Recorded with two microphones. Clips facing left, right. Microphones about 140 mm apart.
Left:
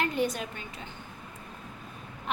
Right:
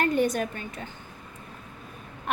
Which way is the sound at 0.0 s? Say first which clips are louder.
Right 5 dB; 50° right (ahead or behind).